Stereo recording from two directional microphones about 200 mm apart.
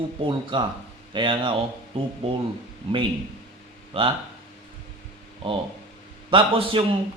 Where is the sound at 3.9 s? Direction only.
25° right (ahead or behind).